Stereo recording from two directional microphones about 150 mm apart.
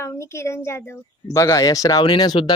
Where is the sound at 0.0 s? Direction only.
20° left (ahead or behind).